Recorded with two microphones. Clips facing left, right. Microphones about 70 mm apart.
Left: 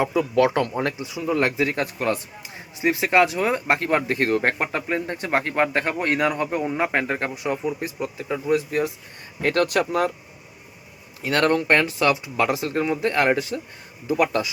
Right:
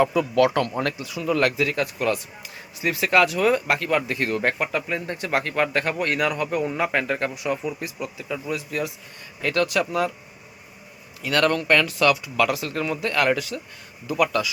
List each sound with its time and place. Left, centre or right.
0.0 s speech: left
11.2 s speech: left